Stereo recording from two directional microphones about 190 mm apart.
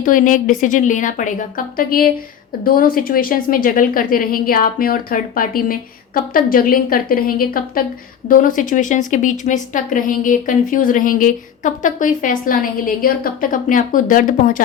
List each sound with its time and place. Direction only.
0.0 s speech: 45° left (ahead or behind)